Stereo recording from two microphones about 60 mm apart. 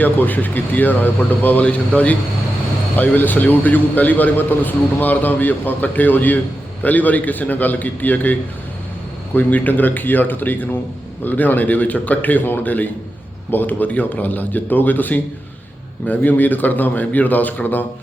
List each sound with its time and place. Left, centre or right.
0.0 s a man's voice: left
1.6 s a man's voice: left